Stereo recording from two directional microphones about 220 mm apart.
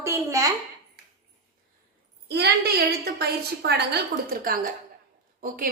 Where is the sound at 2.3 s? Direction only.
50° right (ahead or behind).